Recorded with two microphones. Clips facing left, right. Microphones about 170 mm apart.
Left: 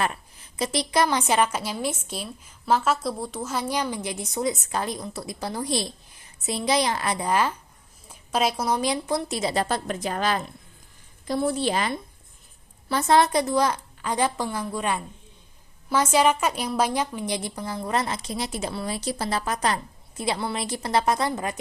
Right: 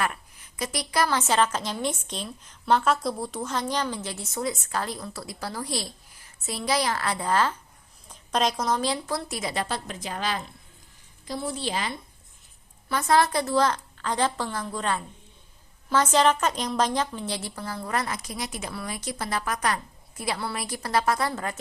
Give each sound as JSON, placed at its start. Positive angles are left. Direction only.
{"t": 0.0, "sound": "a woman's voice", "side_deg": 25}
{"t": 9.6, "sound": "a woman's voice", "side_deg": 50}
{"t": 12.9, "sound": "a woman's voice", "side_deg": 25}